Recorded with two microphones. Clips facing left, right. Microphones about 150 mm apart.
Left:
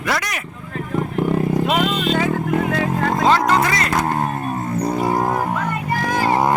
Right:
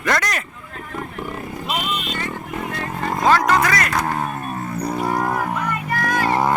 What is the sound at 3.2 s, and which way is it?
Speech, 25° left (ahead or behind).